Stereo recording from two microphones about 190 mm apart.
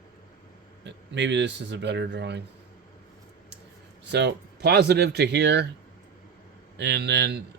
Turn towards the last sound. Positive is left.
turn(degrees=-65)  # may be behind; listen again after turning